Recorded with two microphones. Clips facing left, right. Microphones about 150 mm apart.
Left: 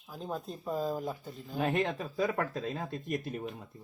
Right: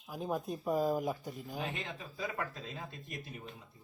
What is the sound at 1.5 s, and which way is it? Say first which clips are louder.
Speech: left 12 dB; 60° left (ahead or behind).